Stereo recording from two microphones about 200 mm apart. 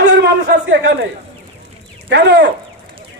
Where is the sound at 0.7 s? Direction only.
60° right (ahead or behind).